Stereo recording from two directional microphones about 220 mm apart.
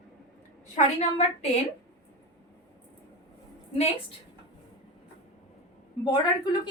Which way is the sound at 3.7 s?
25° left (ahead or behind).